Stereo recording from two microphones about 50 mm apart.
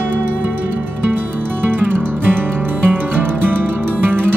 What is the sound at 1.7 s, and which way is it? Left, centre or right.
Music, right.